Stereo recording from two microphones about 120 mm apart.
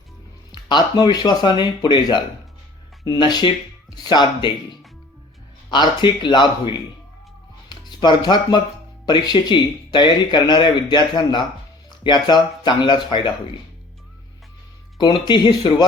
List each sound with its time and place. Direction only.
0.5 s speech: 40° left (ahead or behind)
5.7 s speech: 40° left (ahead or behind)
14.9 s speech: 35° left (ahead or behind)